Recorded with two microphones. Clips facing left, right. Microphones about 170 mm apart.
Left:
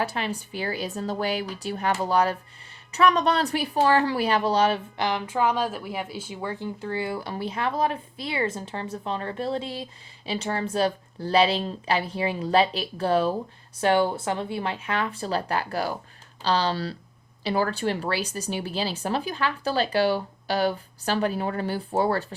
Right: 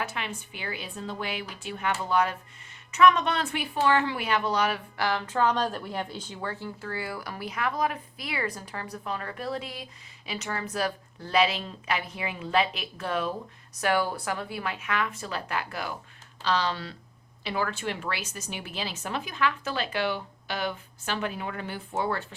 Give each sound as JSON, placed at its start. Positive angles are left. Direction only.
{"t": 0.0, "sound": "speech", "side_deg": 35}